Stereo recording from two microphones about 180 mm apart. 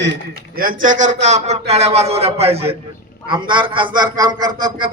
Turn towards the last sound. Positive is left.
turn(degrees=-25)  # may be behind; listen again after turning